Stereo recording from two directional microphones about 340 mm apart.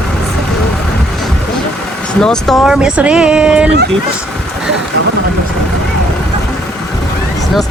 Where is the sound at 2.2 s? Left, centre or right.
Centre.